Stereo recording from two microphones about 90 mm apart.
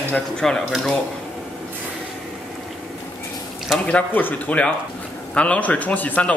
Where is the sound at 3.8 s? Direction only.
15° left (ahead or behind).